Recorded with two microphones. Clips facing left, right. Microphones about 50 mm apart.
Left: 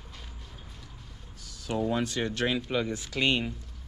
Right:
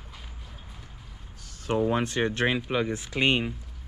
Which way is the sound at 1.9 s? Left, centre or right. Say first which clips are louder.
Right 3 dB; right.